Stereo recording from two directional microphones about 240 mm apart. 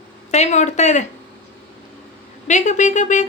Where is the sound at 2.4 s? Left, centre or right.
Left.